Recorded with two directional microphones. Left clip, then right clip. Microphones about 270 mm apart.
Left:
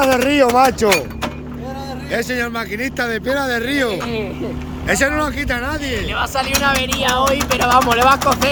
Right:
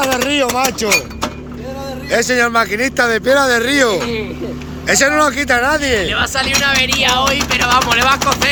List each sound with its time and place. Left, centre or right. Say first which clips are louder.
0.0 s speech: left 1 dB; centre
2.0 s speech: right 7 dB; centre
6.1 s speech: right 3 dB; left
8.2 s speech: right 1 dB; right